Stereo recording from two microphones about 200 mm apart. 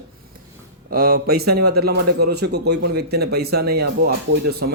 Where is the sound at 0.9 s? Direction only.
50° right (ahead or behind).